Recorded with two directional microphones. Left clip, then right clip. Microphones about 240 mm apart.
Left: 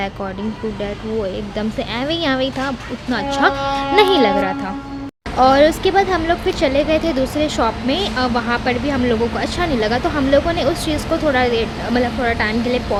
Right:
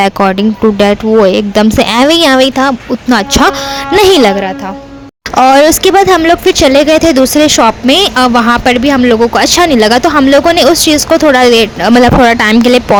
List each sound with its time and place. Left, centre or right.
0.0 s speech: right